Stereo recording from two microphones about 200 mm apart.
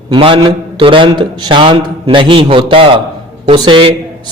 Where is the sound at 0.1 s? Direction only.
25° right (ahead or behind).